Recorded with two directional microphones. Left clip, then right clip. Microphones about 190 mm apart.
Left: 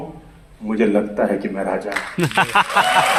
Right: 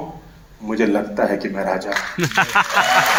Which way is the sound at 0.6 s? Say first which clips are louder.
Left 1 dB; 45° right (ahead or behind).